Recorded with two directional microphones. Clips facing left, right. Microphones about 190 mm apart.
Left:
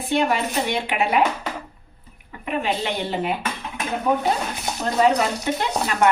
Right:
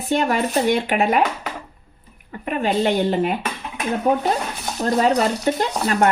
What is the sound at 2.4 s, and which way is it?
Speech, 45° right (ahead or behind).